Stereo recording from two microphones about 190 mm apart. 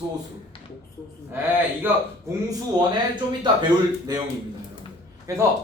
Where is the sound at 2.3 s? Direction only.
15° right (ahead or behind).